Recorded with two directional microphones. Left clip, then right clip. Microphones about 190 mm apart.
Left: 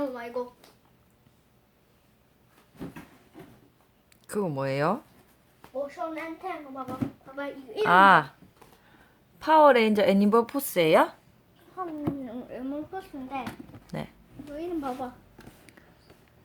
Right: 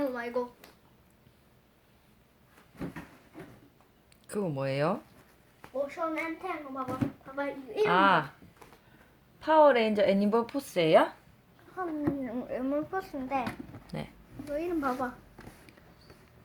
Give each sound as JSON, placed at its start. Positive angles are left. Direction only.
{"t": 0.0, "sound": "a sound", "side_deg": -5}
{"t": 4.3, "sound": "speech", "side_deg": 25}
{"t": 5.6, "sound": "a woman's voice", "side_deg": -5}
{"t": 6.4, "sound": "a child's voice", "side_deg": 5}
{"t": 7.9, "sound": "a woman's voice", "side_deg": 30}
{"t": 9.4, "sound": "a woman's voice", "side_deg": 40}
{"t": 11.7, "sound": "a child's voice", "side_deg": 5}
{"t": 12.4, "sound": "speech", "side_deg": -20}
{"t": 13.8, "sound": "speech", "side_deg": 20}
{"t": 14.5, "sound": "a woman's voice", "side_deg": -15}